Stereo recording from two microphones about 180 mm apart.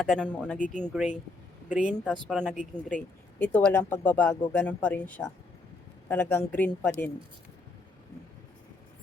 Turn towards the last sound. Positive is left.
turn(degrees=10)  # may be behind; listen again after turning